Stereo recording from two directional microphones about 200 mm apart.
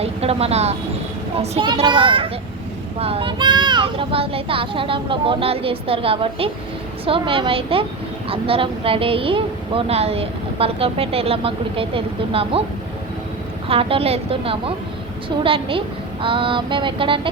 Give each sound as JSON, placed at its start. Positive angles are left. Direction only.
{"t": 0.0, "sound": "a woman's voice", "side_deg": -30}
{"t": 13.7, "sound": "a woman's voice", "side_deg": -30}